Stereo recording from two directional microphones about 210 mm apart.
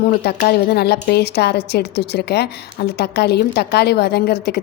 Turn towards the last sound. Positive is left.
turn(degrees=50)  # may be behind; listen again after turning